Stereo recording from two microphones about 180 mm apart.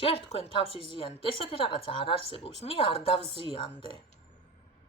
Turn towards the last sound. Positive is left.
turn(degrees=30)  # may be behind; listen again after turning